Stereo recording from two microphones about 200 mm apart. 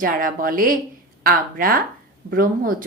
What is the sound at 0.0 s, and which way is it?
Speech, 45° right (ahead or behind).